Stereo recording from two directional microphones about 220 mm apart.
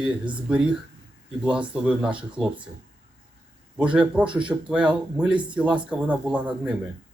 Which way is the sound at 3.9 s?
5° right (ahead or behind).